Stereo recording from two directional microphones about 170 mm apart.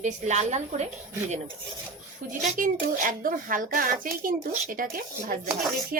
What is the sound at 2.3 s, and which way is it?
Speech, 55° right (ahead or behind).